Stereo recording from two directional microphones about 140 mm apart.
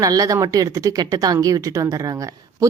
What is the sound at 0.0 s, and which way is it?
Speech, 25° right (ahead or behind).